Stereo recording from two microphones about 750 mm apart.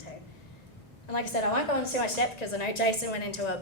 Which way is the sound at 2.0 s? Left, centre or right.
Left.